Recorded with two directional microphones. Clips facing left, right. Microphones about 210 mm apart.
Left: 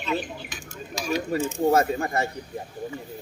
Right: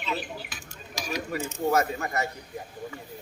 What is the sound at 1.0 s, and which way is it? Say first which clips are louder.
Speech: left 6 dB; 30° left (ahead or behind).